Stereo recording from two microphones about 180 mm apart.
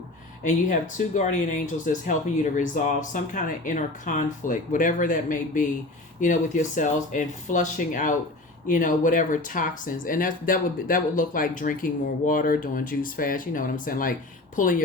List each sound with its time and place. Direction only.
0.4 s speech: 45° left (ahead or behind)